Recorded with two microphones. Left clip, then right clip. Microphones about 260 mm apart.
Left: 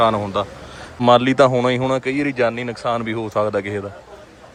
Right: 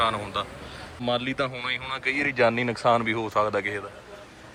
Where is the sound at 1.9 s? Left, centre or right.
Centre.